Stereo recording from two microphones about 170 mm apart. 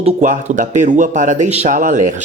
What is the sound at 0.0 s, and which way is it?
Speech, 45° right (ahead or behind).